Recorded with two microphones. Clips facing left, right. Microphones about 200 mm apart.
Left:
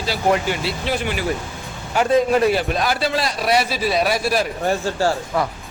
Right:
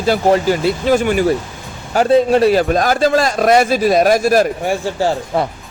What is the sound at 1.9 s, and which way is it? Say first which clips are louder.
A man's voice: right 5 dB; 30° right (ahead or behind).